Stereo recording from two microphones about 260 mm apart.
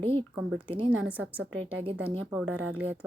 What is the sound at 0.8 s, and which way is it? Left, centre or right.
Speech, centre.